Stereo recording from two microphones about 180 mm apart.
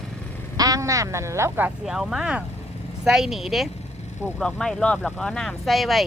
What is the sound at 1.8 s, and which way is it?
Speech, centre (ahead or behind).